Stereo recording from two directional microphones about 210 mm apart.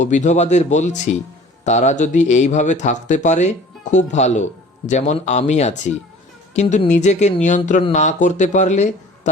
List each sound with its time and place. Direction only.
0.0 s a man's voice: 35° left (ahead or behind)